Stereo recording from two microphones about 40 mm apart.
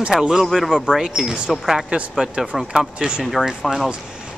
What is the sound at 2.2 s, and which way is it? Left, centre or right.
Speech, right.